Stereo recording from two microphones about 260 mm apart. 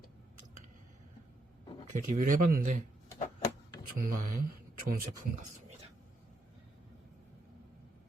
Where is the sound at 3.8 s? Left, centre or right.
Right.